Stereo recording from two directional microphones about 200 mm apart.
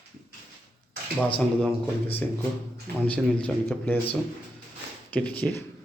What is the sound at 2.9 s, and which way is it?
Speech, 50° right (ahead or behind).